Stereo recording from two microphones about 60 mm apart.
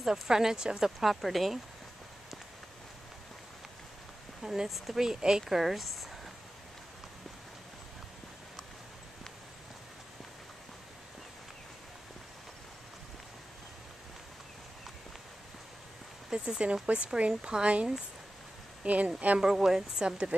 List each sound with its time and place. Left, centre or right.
0.0 s speech: centre
4.4 s speech: centre
16.3 s speech: centre
19.4 s speech: centre